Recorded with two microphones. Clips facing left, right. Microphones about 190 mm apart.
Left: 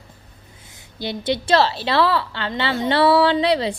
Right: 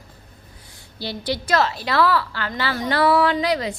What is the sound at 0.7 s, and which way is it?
A woman's voice, 20° left (ahead or behind).